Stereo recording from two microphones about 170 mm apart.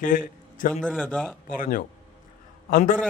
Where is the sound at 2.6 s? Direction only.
50° left (ahead or behind).